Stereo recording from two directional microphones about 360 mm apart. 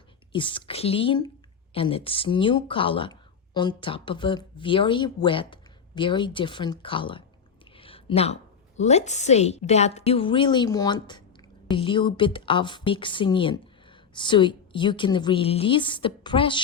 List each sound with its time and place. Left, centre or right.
0.3 s speech: centre
7.8 s a sound: centre
8.8 s speech: centre